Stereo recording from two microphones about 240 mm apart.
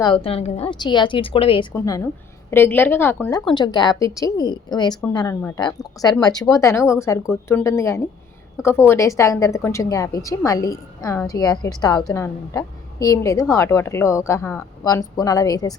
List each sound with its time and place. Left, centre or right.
0.0 s a woman's voice: left